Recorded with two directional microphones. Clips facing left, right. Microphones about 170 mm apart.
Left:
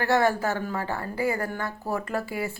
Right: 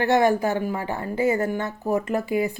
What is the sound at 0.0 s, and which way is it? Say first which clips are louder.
A woman's voice: right 4 dB; 20° right (ahead or behind).